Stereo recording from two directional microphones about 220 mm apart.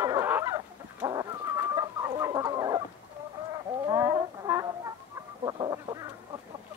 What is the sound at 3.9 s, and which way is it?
Chicken, 15° right (ahead or behind).